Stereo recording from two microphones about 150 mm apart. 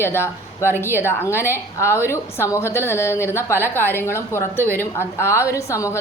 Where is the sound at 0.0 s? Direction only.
15° left (ahead or behind).